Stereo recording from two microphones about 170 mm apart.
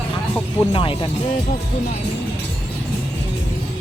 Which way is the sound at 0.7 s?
30° left (ahead or behind).